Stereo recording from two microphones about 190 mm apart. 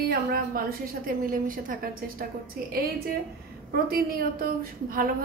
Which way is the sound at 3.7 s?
55° right (ahead or behind).